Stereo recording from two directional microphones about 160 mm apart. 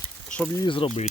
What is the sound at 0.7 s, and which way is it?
Speech, 35° left (ahead or behind).